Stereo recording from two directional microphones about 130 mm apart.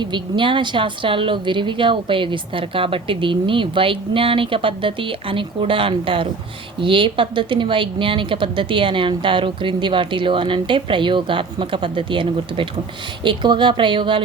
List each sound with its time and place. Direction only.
0.0 s a woman's voice: 40° right (ahead or behind)